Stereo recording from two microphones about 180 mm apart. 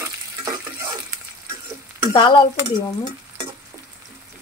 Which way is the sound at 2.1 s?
25° left (ahead or behind).